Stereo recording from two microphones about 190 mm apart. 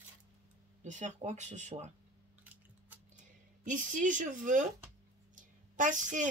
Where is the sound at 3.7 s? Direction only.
45° right (ahead or behind).